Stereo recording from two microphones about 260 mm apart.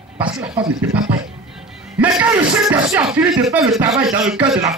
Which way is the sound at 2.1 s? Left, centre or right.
Centre.